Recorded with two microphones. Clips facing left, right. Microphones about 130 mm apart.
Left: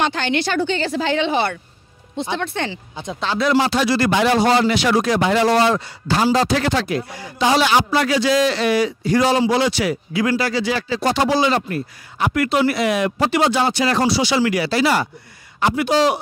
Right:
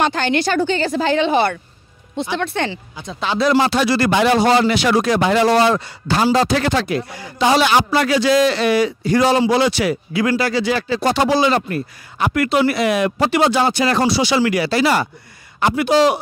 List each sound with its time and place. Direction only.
0.0 s speech: 45° right (ahead or behind)
2.3 s speech: 65° right (ahead or behind)